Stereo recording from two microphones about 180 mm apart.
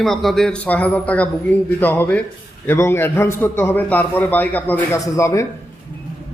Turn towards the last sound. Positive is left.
turn(degrees=15)  # may be behind; listen again after turning